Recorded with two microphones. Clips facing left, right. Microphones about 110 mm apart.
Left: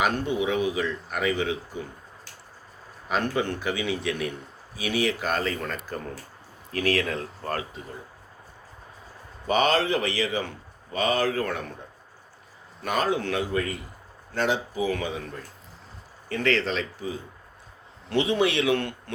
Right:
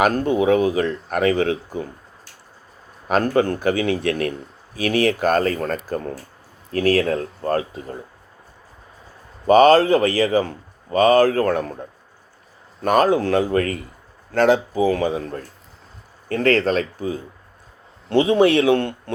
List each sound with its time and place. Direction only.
0.0 s speech: 50° right (ahead or behind)
3.1 s a man's voice: 45° right (ahead or behind)
9.5 s speech: 45° right (ahead or behind)
12.8 s speech: 50° right (ahead or behind)
13.5 s speech: 60° right (ahead or behind)
14.8 s a man's voice: 40° right (ahead or behind)
18.1 s a man's voice: 35° right (ahead or behind)